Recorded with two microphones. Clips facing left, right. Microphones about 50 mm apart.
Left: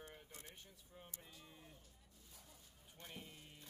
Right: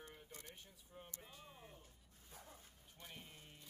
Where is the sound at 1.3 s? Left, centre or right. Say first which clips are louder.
Right 2 dB; right.